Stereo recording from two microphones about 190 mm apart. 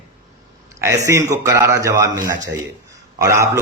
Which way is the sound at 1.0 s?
15° right (ahead or behind).